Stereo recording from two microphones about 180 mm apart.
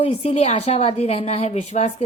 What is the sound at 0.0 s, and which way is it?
Speech, 35° left (ahead or behind).